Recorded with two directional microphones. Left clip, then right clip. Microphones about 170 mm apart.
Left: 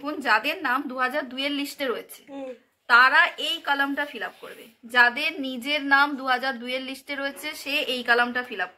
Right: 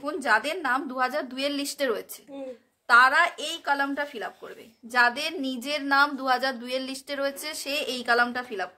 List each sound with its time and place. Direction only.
0.0 s a woman's voice: 55° right (ahead or behind)